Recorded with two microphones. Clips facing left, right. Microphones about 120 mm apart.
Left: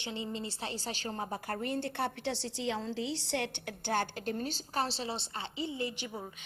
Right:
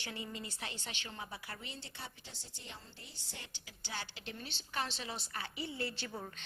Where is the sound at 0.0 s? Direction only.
25° left (ahead or behind).